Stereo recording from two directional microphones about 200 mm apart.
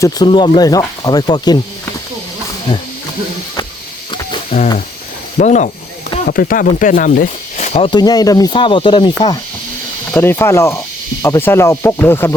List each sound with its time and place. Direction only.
0.0 s speech: 20° left (ahead or behind)
4.1 s a sound: 20° left (ahead or behind)
5.4 s speech: 35° left (ahead or behind)
6.2 s speech: 45° left (ahead or behind); by 9.4 s 20° left (ahead or behind)
10.1 s speech: 10° left (ahead or behind)